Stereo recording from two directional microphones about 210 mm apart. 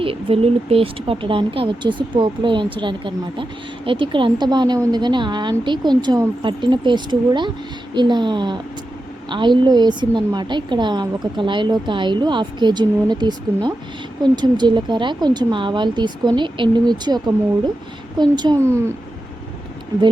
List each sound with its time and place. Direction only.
0.0 s a woman's voice: 25° right (ahead or behind)